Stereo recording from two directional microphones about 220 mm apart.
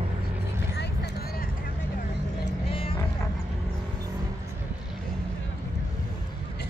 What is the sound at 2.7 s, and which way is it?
Vehicle, 25° left (ahead or behind).